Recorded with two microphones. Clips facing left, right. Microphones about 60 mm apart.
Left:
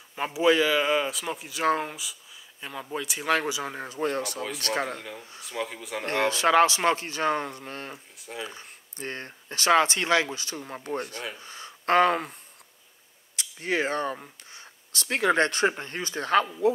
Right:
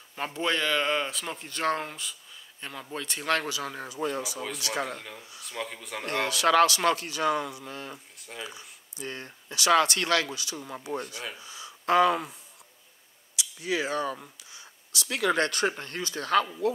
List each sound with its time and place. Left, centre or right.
0.1 s speech: centre
3.9 s speech: left
5.4 s speech: centre
6.0 s speech: left
7.9 s speech: centre
8.5 s speech: left
9.8 s speech: left
10.3 s speech: left
13.4 s speech: left